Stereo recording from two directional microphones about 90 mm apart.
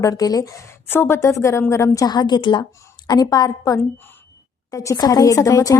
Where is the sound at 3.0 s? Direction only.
45° left (ahead or behind).